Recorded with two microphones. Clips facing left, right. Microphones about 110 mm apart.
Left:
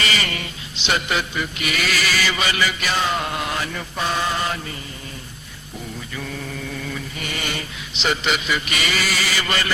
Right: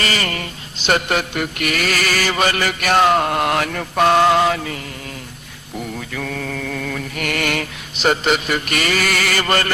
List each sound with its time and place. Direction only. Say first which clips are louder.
0.0 s mantra: right 3 dB; 45° right (ahead or behind); by 4.8 s 90° right
6.1 s mantra: right 5 dB; 75° right (ahead or behind)
7.9 s mantra: right 5 dB; 45° right (ahead or behind)